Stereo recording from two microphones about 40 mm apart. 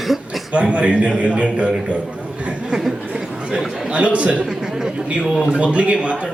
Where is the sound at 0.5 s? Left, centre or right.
Right.